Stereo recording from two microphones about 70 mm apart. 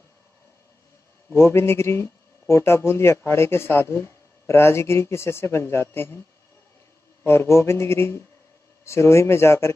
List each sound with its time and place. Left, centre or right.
1.3 s speech: left
7.2 s speech: left